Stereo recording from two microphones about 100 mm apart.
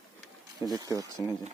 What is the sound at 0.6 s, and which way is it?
Speech, 40° right (ahead or behind).